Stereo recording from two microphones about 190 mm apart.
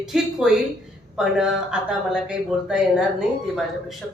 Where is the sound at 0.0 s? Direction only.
5° right (ahead or behind).